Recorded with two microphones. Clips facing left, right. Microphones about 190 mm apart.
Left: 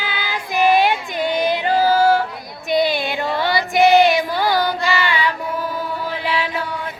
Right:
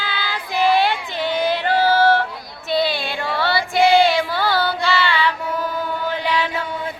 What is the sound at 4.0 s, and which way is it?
Child singing, 20° left (ahead or behind).